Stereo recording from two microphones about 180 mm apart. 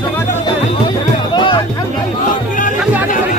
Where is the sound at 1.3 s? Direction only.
25° left (ahead or behind).